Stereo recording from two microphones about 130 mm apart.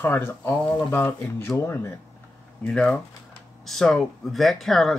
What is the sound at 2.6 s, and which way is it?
Speech, 5° left (ahead or behind).